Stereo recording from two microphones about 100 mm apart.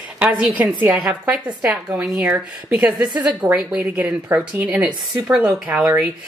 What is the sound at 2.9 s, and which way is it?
Speech, 45° right (ahead or behind).